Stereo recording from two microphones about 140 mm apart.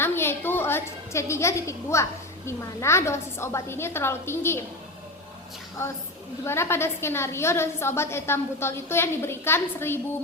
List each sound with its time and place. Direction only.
0.0 s a woman's voice: 15° left (ahead or behind)
6.4 s a woman's voice: 20° left (ahead or behind)